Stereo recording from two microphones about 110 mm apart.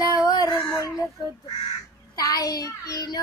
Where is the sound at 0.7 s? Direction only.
30° left (ahead or behind).